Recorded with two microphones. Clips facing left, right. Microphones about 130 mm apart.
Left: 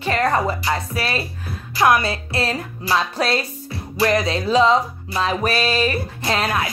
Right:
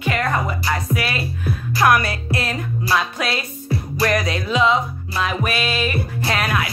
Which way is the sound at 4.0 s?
25° left (ahead or behind).